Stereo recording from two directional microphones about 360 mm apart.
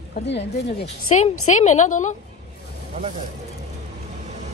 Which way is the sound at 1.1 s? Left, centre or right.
Centre.